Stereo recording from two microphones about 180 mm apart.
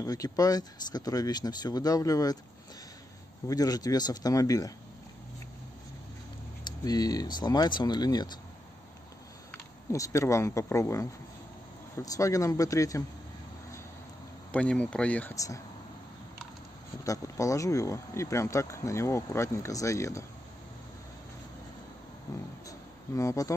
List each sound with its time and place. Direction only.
0.0 s speech: 20° left (ahead or behind)
3.4 s speech: 20° left (ahead or behind)
6.6 s speech: 20° left (ahead or behind)
9.5 s speech: 15° left (ahead or behind)
14.5 s speech: 5° left (ahead or behind)
15.3 s speech: 20° left (ahead or behind)
17.0 s speech: 20° left (ahead or behind)
22.3 s speech: 20° left (ahead or behind)